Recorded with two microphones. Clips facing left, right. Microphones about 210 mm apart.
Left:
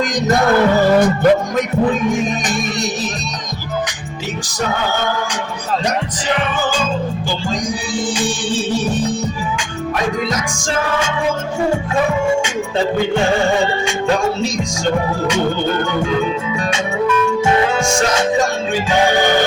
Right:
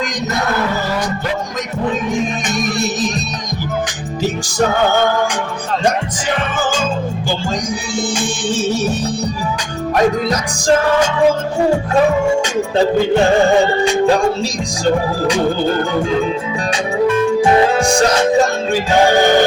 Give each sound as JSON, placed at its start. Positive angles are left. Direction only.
{"t": 0.9, "sound": "music", "side_deg": 55}
{"t": 8.1, "sound": "music", "side_deg": -45}
{"t": 10.2, "sound": "music", "side_deg": -35}
{"t": 15.8, "sound": "music", "side_deg": -35}